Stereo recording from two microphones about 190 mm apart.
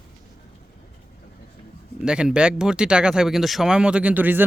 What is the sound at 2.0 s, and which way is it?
Speech, 5° right (ahead or behind).